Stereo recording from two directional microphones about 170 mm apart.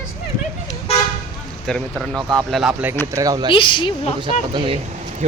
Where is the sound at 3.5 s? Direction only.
30° left (ahead or behind).